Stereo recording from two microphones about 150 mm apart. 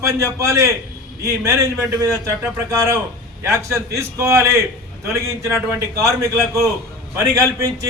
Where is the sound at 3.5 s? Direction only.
20° right (ahead or behind).